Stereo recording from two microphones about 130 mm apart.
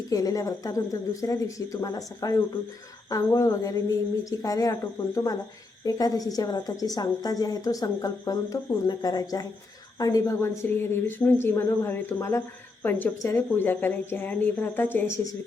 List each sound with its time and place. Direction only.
0.1 s a woman's voice: 25° left (ahead or behind)